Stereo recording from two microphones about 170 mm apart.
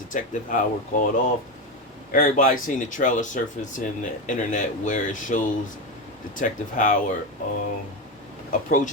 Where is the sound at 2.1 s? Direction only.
50° left (ahead or behind).